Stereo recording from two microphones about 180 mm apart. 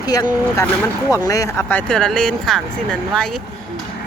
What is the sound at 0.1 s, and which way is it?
Speech, 20° left (ahead or behind).